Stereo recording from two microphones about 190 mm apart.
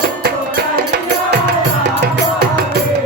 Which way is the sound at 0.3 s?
60° right (ahead or behind).